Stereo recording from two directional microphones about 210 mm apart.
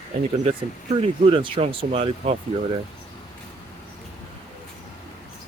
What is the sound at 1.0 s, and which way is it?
Speech, 25° right (ahead or behind).